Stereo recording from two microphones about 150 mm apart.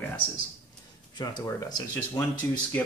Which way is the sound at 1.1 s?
25° left (ahead or behind).